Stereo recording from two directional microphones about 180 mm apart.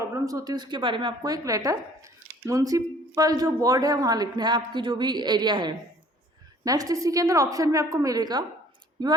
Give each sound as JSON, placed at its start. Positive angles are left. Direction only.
{"t": 0.0, "sound": "speech", "side_deg": -15}